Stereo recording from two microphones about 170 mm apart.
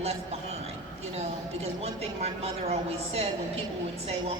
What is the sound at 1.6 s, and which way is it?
A woman's voice, 35° right (ahead or behind).